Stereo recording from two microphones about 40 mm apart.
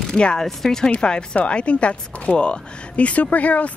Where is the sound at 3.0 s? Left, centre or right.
Left.